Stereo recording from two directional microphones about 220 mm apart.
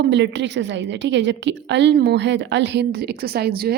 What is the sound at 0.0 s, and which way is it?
Speech, 50° right (ahead or behind).